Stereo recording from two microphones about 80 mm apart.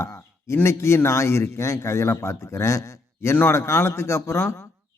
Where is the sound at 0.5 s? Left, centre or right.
Left.